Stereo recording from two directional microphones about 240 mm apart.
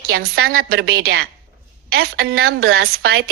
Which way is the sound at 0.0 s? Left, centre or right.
Right.